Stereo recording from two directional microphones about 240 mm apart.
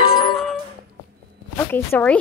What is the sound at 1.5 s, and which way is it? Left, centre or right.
Speech, centre.